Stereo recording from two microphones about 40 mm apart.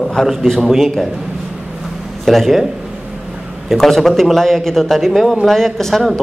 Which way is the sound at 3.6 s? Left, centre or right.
Centre.